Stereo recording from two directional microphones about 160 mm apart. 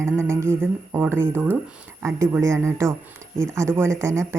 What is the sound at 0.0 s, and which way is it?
Speech, 15° right (ahead or behind).